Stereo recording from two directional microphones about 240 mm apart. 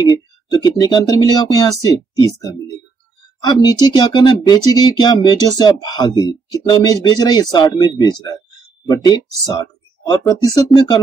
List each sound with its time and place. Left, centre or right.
0.0 s speech: centre